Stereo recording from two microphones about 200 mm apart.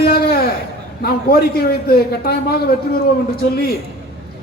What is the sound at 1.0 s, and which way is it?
A man's voice, 50° left (ahead or behind).